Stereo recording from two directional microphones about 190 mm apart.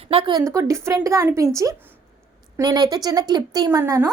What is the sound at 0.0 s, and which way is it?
A woman's voice, 30° right (ahead or behind).